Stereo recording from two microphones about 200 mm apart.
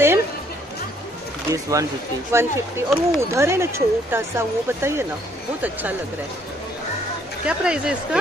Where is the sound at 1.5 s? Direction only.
15° right (ahead or behind).